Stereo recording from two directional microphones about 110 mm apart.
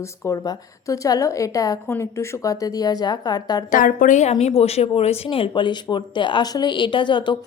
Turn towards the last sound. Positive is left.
turn(degrees=45)  # may be behind; listen again after turning